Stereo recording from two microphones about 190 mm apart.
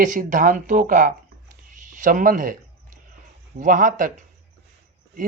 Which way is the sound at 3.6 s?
45° right (ahead or behind).